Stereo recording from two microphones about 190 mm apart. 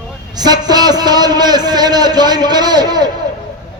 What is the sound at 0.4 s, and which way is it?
A man's voice, 20° right (ahead or behind).